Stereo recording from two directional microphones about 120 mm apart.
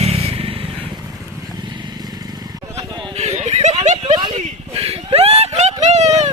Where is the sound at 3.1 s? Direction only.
65° right (ahead or behind).